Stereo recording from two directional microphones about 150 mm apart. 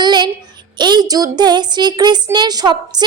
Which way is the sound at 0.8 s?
30° right (ahead or behind).